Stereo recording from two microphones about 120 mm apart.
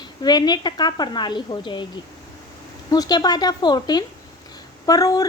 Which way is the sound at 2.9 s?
35° left (ahead or behind).